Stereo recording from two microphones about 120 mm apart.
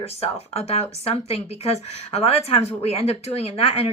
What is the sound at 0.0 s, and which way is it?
Speech, 55° left (ahead or behind).